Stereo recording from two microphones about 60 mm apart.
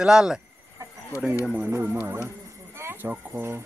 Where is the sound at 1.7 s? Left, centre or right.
Right.